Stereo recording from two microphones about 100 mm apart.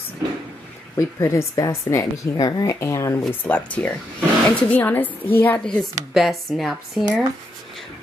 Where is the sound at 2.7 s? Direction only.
30° left (ahead or behind).